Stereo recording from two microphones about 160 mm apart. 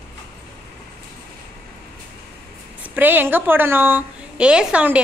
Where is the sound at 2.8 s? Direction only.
10° right (ahead or behind).